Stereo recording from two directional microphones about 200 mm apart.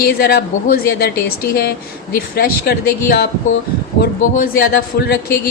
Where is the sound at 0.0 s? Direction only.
50° left (ahead or behind).